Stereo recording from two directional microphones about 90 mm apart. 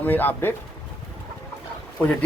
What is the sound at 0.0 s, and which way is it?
Speech, 20° left (ahead or behind).